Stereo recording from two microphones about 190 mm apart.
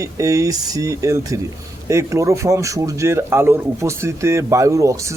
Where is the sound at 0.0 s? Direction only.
15° right (ahead or behind).